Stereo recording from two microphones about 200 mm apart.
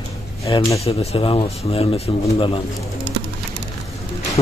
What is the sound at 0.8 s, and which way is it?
Speech, 30° left (ahead or behind).